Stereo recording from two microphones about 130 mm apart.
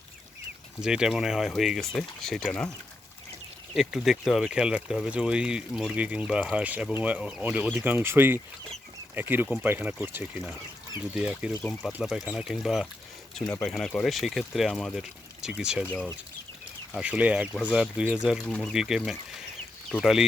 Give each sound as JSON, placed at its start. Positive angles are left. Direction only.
{"t": 0.8, "sound": "speech", "side_deg": -5}
{"t": 3.8, "sound": "speech", "side_deg": -5}
{"t": 17.0, "sound": "speech", "side_deg": -10}